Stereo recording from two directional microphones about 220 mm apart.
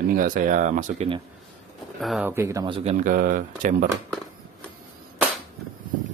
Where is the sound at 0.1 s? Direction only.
40° right (ahead or behind).